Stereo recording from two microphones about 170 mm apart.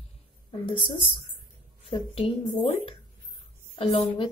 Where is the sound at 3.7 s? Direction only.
35° left (ahead or behind).